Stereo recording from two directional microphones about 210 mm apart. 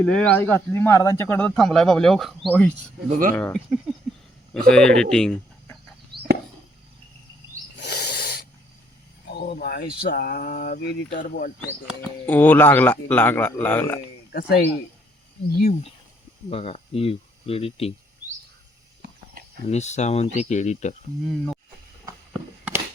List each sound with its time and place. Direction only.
0.0 s speech: 5° left (ahead or behind)
3.1 s speech: 40° right (ahead or behind)
3.3 s speech: 5° left (ahead or behind)
6.1 s chop: 50° right (ahead or behind)
7.8 s owl: 50° left (ahead or behind)
9.3 s speech: 50° left (ahead or behind)
12.2 s speech: 10° left (ahead or behind)
14.3 s speech: 50° left (ahead or behind)
16.5 s speech: 30° left (ahead or behind)
19.6 s speech: 30° left (ahead or behind)
21.2 s speech: centre (ahead or behind)
22.3 s a sound: 5° right (ahead or behind)